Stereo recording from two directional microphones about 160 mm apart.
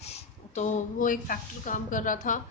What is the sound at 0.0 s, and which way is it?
Speech, 45° left (ahead or behind).